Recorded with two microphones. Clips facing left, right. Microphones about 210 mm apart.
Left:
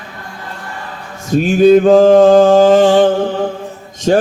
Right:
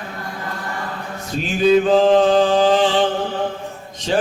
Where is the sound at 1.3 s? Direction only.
50° left (ahead or behind).